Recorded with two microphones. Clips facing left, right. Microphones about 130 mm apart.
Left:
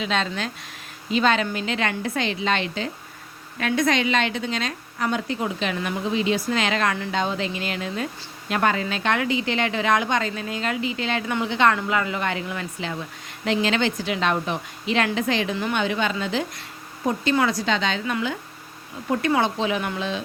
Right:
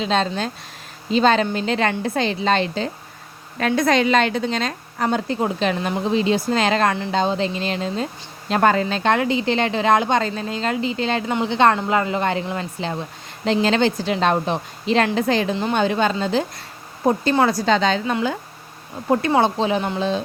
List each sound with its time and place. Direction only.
0.0 s speech: 35° right (ahead or behind)